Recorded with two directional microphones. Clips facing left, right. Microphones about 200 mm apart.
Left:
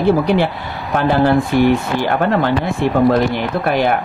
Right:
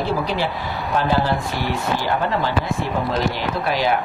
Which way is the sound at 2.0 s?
60° left (ahead or behind).